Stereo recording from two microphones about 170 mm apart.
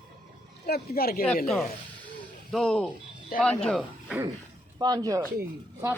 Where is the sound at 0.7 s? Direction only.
65° left (ahead or behind).